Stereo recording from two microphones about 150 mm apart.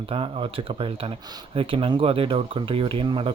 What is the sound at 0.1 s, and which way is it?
Speech, 40° right (ahead or behind).